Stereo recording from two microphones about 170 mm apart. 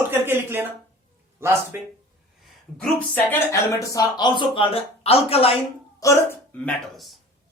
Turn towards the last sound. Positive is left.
turn(degrees=10)  # may be behind; listen again after turning